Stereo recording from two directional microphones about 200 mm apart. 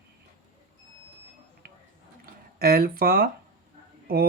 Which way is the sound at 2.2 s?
50° right (ahead or behind).